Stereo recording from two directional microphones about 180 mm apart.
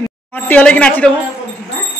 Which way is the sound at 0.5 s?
10° left (ahead or behind).